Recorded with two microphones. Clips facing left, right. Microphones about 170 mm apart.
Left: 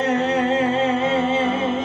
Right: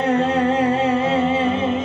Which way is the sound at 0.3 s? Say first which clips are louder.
Right 1 dB; 20° left (ahead or behind).